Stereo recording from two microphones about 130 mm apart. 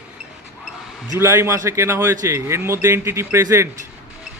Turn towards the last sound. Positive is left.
turn(degrees=-20)  # may be behind; listen again after turning